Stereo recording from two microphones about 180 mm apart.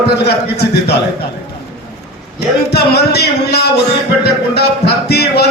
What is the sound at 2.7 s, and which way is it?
Speech, 65° left (ahead or behind).